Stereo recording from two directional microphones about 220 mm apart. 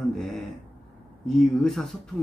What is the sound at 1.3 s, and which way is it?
Speech, centre (ahead or behind).